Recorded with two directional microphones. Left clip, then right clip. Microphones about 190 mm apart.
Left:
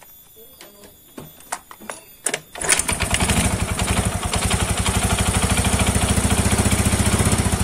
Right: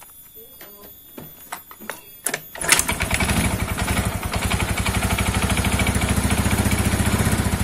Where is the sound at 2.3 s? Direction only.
20° left (ahead or behind).